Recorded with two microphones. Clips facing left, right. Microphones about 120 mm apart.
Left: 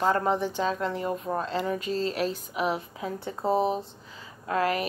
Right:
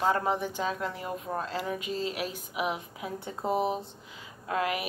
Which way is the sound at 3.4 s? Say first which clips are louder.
Left 3 dB; 35° left (ahead or behind).